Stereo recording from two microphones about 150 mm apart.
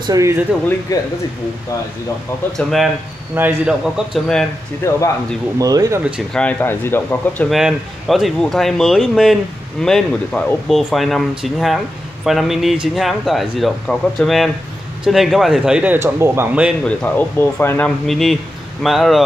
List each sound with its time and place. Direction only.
0.0 s speech: 20° right (ahead or behind)
0.9 s speech: 25° left (ahead or behind)
2.5 s speech: centre (ahead or behind)
3.3 s a man's voice: 15° right (ahead or behind)
4.1 s speech: 5° left (ahead or behind)
5.6 s speech: 25° right (ahead or behind)
6.3 s speech: 10° left (ahead or behind)
7.4 s speech: centre (ahead or behind); by 16.6 s 15° right (ahead or behind)
16.8 s speech: 10° left (ahead or behind)